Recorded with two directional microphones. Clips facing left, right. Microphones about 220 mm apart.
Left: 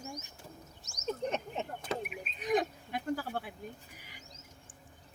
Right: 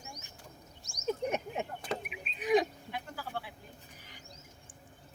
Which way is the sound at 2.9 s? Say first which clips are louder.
Left 7 dB; 45° left (ahead or behind).